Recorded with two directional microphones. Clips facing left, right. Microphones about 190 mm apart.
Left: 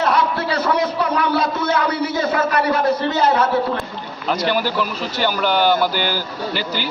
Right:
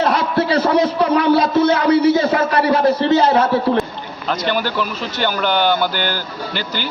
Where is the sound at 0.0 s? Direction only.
30° right (ahead or behind).